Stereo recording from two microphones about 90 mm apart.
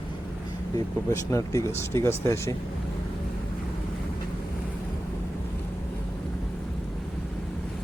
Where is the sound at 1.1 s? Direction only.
35° left (ahead or behind).